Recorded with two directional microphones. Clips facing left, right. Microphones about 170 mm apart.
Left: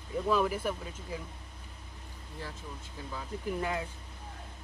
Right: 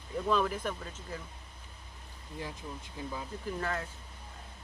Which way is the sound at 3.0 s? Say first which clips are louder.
Right 5 dB; 15° right (ahead or behind).